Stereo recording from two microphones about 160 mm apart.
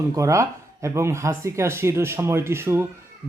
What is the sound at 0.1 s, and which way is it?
Speech, 20° right (ahead or behind).